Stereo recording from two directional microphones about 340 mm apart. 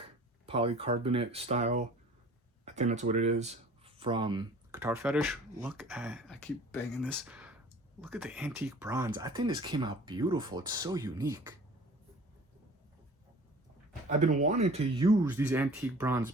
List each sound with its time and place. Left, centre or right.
0.4 s speech: centre
14.1 s speech: right